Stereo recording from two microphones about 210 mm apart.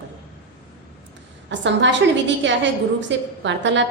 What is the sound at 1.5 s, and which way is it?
A woman's voice, 60° right (ahead or behind).